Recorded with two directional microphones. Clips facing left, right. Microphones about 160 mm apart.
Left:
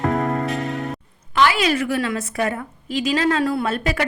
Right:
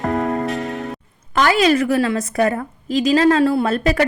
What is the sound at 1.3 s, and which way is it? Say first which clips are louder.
A woman's voice: right 3 dB; 40° right (ahead or behind).